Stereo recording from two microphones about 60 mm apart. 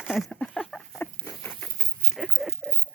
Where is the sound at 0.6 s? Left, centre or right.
Centre.